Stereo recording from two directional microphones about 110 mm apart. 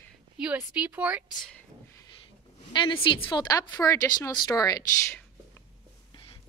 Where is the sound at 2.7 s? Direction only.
50° left (ahead or behind).